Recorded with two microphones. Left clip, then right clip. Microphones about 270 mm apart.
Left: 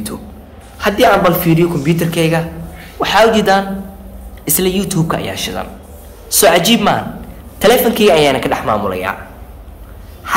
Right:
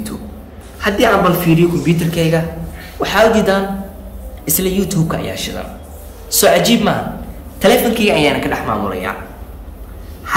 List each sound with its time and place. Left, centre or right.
0.7 s a woman's voice: left